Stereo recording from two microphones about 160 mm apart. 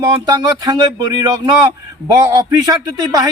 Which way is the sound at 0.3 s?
20° right (ahead or behind).